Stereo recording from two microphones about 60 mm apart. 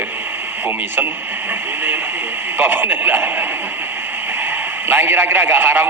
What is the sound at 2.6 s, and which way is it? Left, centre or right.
Speech, right.